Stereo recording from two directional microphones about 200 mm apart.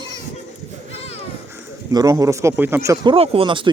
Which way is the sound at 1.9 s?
15° right (ahead or behind).